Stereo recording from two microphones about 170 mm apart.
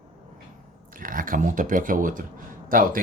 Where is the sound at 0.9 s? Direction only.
55° right (ahead or behind).